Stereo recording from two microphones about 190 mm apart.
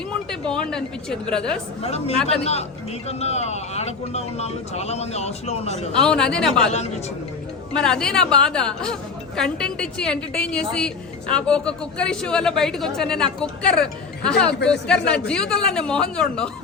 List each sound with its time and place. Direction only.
0.3 s a woman's voice: 5° left (ahead or behind)
1.8 s speech: 35° left (ahead or behind)
5.9 s a woman's voice: 5° left (ahead or behind)
6.7 s speech: 35° left (ahead or behind)
7.7 s a woman's voice: 5° left (ahead or behind)